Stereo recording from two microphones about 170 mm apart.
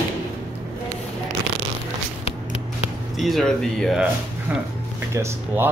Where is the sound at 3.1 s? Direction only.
Centre (ahead or behind).